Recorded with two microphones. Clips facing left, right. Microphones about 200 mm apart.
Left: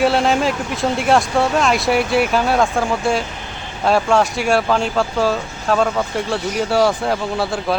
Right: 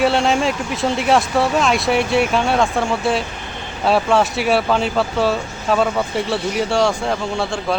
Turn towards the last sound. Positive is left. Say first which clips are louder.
# left 1 dB
turn(degrees=5)  # may be behind; listen again after turning